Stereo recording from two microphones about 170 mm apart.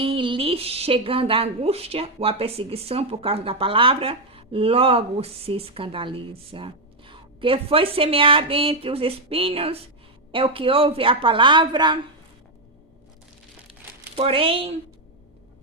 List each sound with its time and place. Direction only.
0.0 s a woman's voice: 30° right (ahead or behind)
14.2 s a woman's voice: 35° right (ahead or behind)